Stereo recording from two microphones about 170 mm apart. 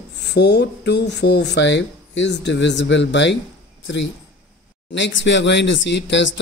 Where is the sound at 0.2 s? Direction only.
85° left.